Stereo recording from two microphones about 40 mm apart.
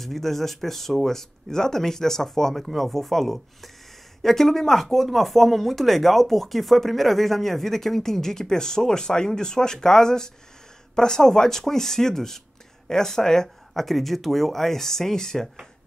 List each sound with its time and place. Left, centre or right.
0.0 s speech: centre